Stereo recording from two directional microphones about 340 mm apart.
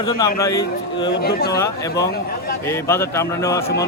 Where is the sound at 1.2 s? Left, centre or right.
Left.